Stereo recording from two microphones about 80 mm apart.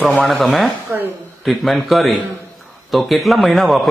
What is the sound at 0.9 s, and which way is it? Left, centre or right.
Speech, right.